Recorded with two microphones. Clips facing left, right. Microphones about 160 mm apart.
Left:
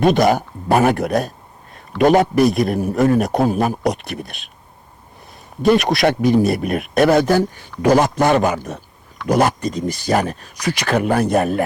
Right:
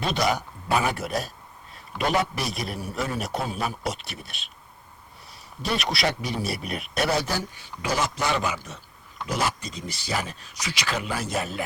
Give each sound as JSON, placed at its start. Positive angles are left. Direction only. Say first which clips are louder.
{"t": 0.0, "sound": "speech", "louder": "left 11 dB", "side_deg": 50}
{"t": 5.6, "sound": "speech", "louder": "left 12 dB", "side_deg": 45}